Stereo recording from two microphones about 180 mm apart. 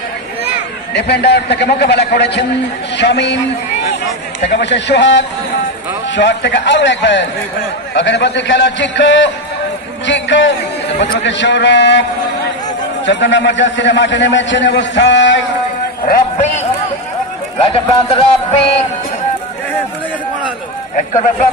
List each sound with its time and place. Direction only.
0.9 s a man's voice: 70° left (ahead or behind)
4.4 s a man's voice: 75° left (ahead or behind)
13.0 s a man's voice: 80° left
16.1 s speech: 40° left (ahead or behind)
17.9 s speech: 35° left (ahead or behind)